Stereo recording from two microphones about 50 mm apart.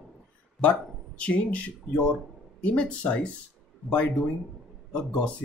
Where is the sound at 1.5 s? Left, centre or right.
Left.